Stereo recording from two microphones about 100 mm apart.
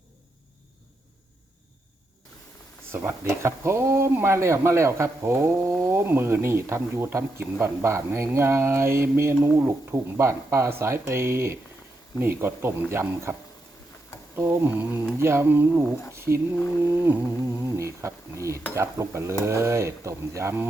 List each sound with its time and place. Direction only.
2.9 s speech: 25° right (ahead or behind)
14.3 s speech: 25° right (ahead or behind)
16.1 s a sound: 25° right (ahead or behind)
16.8 s speech: 25° right (ahead or behind)